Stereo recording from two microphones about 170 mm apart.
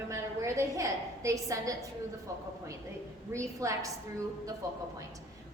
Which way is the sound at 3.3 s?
15° right (ahead or behind).